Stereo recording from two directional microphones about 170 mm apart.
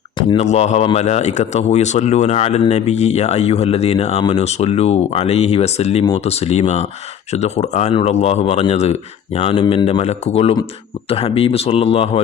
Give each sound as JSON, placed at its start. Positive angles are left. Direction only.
{"t": 0.2, "sound": "speech", "side_deg": 30}
{"t": 0.4, "sound": "speech", "side_deg": 40}